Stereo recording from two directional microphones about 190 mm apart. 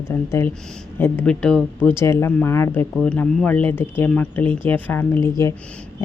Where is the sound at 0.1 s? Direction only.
15° left (ahead or behind).